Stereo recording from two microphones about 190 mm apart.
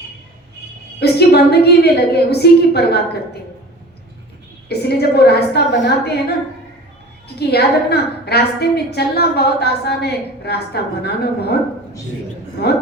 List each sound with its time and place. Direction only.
0.9 s a woman's voice: 60° left (ahead or behind)
4.7 s a woman's voice: 60° left (ahead or behind)
7.3 s a woman's voice: 60° left (ahead or behind)